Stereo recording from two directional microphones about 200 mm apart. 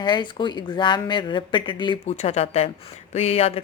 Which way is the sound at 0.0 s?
20° left (ahead or behind).